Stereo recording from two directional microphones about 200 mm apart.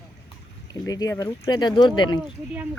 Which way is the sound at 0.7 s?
20° left (ahead or behind).